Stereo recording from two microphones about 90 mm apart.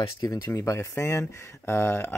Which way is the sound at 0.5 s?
30° left (ahead or behind).